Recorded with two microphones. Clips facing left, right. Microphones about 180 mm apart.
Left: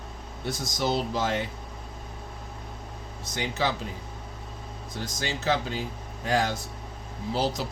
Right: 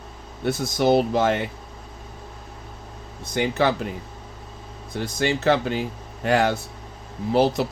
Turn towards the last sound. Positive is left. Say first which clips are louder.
# right 8 dB
turn(degrees=-60)  # may be behind; listen again after turning